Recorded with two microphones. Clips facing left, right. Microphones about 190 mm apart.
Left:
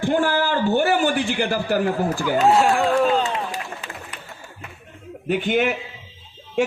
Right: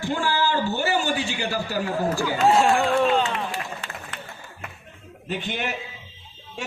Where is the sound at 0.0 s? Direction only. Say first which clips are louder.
Left 4 dB; 55° left (ahead or behind).